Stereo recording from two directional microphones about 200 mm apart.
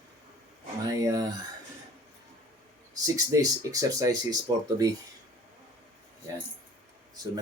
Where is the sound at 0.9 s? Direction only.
15° right (ahead or behind).